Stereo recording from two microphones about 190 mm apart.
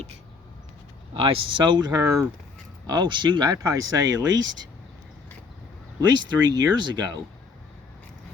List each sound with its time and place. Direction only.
1.1 s speech: 30° right (ahead or behind)
6.1 s speech: 25° right (ahead or behind)